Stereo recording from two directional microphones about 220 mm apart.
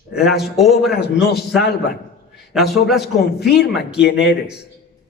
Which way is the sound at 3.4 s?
45° left (ahead or behind).